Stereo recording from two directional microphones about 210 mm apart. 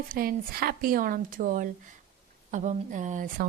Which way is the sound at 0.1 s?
45° right (ahead or behind).